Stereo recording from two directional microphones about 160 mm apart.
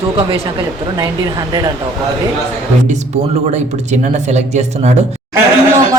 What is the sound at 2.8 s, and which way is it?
Speech, 50° right (ahead or behind).